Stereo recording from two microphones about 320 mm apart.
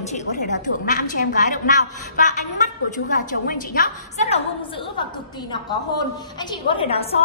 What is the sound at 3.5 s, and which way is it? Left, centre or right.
Speech, left.